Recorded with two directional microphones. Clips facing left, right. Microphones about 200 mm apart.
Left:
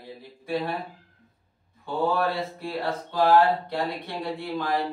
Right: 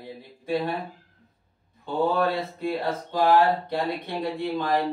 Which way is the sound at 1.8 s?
20° right (ahead or behind).